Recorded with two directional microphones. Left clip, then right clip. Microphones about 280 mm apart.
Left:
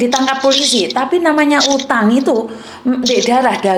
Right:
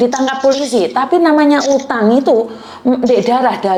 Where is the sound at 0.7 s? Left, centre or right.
Right.